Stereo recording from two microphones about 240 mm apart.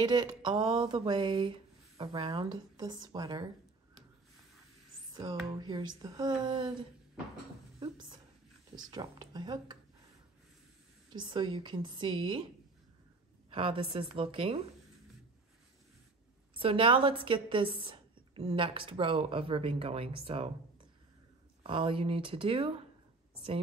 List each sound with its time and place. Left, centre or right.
0.0 s a woman's voice: centre
5.1 s a woman's voice: centre
7.8 s a woman's voice: centre
11.1 s a woman's voice: centre
13.5 s a woman's voice: right
16.5 s a woman's voice: right
21.6 s a woman's voice: right